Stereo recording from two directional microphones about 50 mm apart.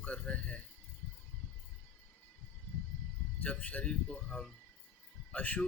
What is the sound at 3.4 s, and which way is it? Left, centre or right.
Speech, left.